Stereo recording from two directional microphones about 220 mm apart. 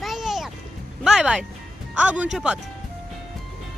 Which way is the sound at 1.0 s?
Centre (ahead or behind).